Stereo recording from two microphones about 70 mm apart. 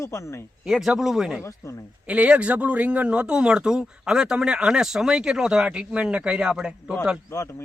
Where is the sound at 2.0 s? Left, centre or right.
Centre.